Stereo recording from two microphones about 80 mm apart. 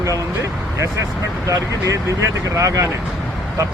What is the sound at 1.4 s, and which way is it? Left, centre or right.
Speech, right.